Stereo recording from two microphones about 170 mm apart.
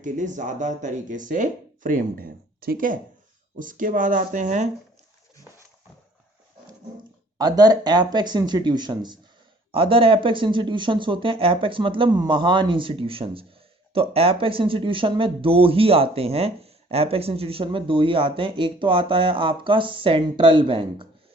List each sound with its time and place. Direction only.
0.0 s speech: 50° right (ahead or behind)
7.3 s speech: 25° right (ahead or behind)